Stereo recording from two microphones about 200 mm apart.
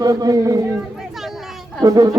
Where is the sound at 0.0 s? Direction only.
15° right (ahead or behind).